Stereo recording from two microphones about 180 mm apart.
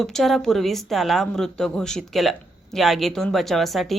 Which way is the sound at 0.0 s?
Centre (ahead or behind).